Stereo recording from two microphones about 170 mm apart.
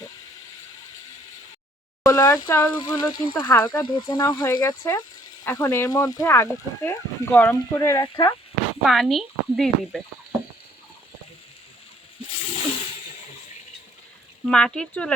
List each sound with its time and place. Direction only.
2.0 s speech: 15° left (ahead or behind)
3.4 s speech: 15° left (ahead or behind)
8.8 s speech: centre (ahead or behind)
12.2 s water: 35° left (ahead or behind)
14.4 s speech: 5° left (ahead or behind)